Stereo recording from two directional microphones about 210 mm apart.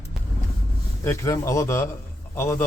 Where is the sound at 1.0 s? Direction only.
15° left (ahead or behind).